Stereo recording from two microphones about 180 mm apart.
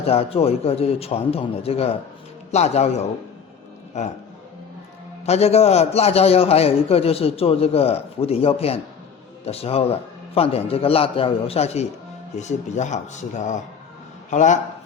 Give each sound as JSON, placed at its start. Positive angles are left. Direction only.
{"t": 0.0, "sound": "a man's voice", "side_deg": 35}
{"t": 3.9, "sound": "a man's voice", "side_deg": 40}
{"t": 5.2, "sound": "a man's voice", "side_deg": 35}